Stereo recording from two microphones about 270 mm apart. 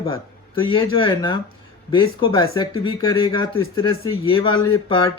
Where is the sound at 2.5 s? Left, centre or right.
Centre.